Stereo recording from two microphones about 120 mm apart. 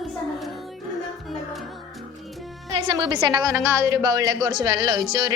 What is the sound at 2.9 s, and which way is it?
Speech, 40° right (ahead or behind).